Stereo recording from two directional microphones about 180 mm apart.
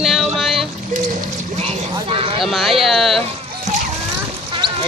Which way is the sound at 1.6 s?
35° right (ahead or behind).